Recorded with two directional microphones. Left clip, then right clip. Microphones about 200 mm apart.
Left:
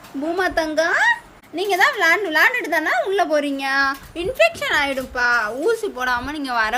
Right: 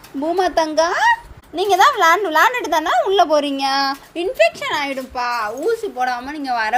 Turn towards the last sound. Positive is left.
turn(degrees=10)  # may be behind; listen again after turning